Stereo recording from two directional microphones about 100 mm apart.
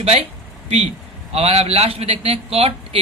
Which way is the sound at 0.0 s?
90° right.